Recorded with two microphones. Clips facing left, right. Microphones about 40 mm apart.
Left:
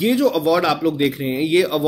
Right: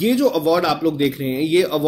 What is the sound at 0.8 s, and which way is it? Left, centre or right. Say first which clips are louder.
Speech: even; left.